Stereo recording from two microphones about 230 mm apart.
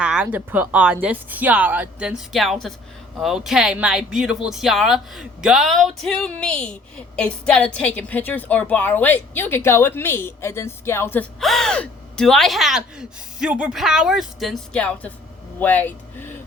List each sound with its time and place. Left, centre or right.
0.0 s speech: centre